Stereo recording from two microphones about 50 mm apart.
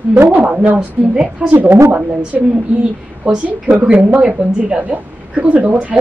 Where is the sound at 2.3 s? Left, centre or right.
Centre.